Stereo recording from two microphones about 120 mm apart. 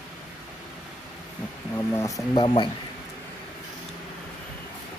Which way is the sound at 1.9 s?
25° left (ahead or behind).